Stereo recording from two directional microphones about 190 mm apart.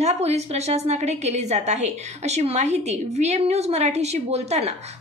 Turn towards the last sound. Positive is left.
turn(degrees=-35)  # may be behind; listen again after turning